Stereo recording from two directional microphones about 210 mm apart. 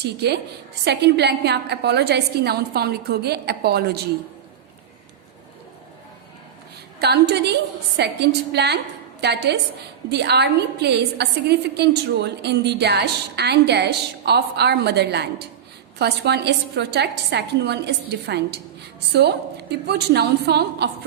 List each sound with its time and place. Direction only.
0.0 s a woman's voice: 50° right (ahead or behind)
7.0 s a woman's voice: 50° right (ahead or behind)